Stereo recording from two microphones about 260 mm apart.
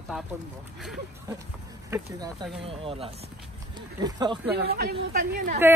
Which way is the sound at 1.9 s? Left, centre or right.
Centre.